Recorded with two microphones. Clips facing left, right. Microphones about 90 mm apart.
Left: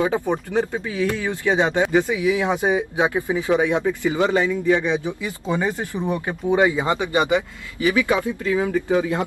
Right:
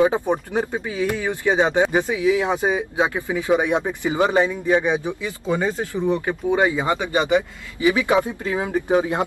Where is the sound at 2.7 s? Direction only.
20° left (ahead or behind).